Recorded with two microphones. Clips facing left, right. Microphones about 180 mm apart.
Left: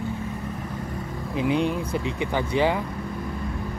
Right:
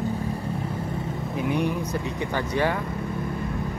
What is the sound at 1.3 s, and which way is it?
Speech, 20° left (ahead or behind).